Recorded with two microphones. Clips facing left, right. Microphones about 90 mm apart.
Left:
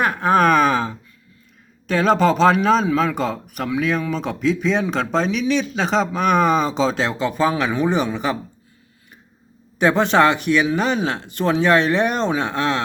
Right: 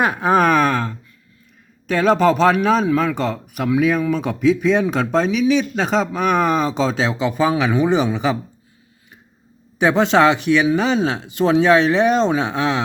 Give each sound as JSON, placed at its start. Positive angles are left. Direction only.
{"t": 0.0, "sound": "speech", "side_deg": -15}
{"t": 0.3, "sound": "speech", "side_deg": 0}
{"t": 0.7, "sound": "speech", "side_deg": 15}
{"t": 1.9, "sound": "speech", "side_deg": 0}
{"t": 9.8, "sound": "speech", "side_deg": 0}